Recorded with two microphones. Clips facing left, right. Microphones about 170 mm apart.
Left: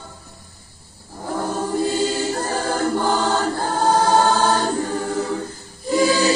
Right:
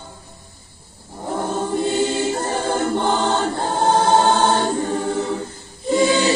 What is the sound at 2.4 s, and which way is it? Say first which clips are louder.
Choir: right 1 dB; 25° right (ahead or behind).